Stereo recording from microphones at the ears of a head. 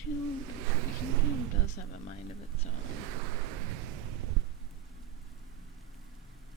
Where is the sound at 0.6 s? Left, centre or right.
Right.